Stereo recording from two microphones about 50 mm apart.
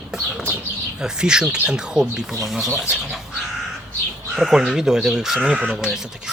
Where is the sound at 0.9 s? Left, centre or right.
Centre.